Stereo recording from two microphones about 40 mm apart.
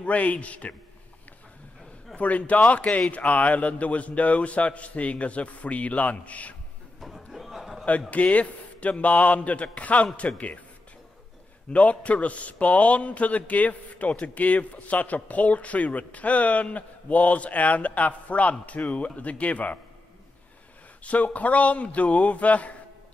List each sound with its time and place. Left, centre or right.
0.0 s speech: left
2.1 s speech: left
7.0 s a sound: centre
8.1 s speech: left
11.7 s speech: left
21.0 s speech: left